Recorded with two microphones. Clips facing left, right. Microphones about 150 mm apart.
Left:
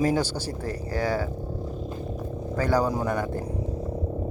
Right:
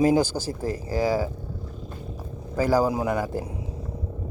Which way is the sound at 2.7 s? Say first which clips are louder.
Right 1 dB; 10° right (ahead or behind).